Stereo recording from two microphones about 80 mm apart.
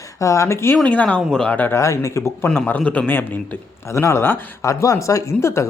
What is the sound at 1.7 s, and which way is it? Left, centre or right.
Speech, left.